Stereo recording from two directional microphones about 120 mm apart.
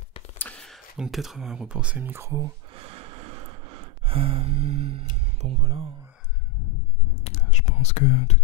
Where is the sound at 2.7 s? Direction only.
55° right (ahead or behind).